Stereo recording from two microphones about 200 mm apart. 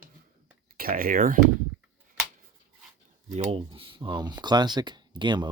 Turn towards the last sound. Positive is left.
turn(degrees=-20)  # may be behind; listen again after turning